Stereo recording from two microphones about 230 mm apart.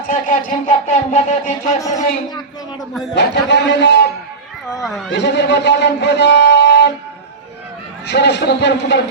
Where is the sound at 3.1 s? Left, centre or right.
Left.